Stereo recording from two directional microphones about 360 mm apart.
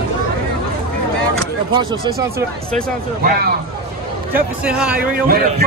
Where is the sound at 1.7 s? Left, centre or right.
Centre.